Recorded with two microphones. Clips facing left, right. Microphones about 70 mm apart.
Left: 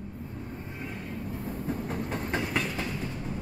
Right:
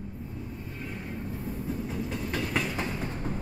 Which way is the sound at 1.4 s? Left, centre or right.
Left.